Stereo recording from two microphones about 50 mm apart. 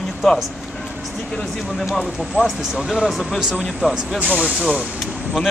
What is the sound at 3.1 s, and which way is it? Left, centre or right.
Speech, centre.